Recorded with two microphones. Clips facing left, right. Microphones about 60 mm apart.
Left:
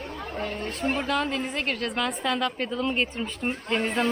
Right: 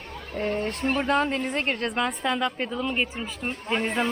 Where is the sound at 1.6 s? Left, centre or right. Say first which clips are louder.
Right 2 dB; right.